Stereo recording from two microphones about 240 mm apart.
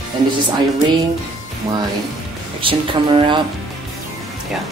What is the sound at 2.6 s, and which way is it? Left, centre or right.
Speech, right.